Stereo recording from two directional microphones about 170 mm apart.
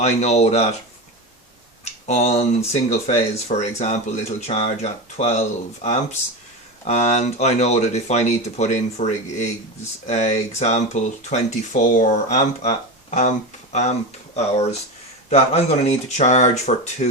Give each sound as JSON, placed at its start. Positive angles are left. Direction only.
{"t": 0.0, "sound": "speech", "side_deg": 40}
{"t": 1.8, "sound": "speech", "side_deg": 40}
{"t": 14.3, "sound": "speech", "side_deg": 40}